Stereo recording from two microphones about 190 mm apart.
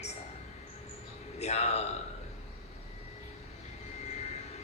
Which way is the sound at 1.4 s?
35° left (ahead or behind).